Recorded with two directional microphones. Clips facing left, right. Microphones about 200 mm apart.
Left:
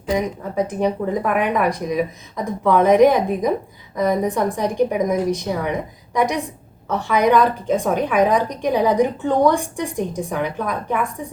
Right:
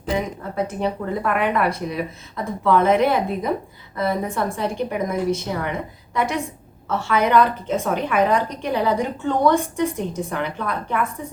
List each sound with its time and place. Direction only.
0.5 s a woman's voice: 15° left (ahead or behind)